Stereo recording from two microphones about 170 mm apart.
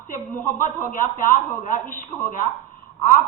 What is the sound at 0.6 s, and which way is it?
A man's voice, 50° left (ahead or behind).